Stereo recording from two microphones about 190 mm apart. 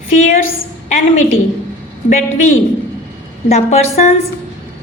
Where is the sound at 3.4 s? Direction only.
35° left (ahead or behind).